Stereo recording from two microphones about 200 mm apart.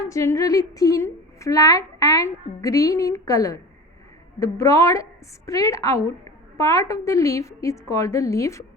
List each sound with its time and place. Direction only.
0.1 s a woman's voice: 15° left (ahead or behind)